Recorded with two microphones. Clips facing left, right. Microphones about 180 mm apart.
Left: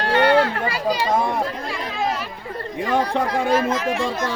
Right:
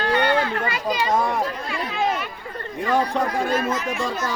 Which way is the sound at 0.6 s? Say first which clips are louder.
Left 2 dB; 30° left (ahead or behind).